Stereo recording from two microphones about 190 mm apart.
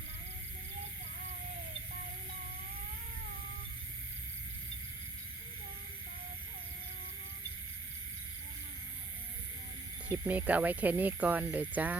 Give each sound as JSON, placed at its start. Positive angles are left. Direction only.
{"t": 10.2, "sound": "speech", "side_deg": -10}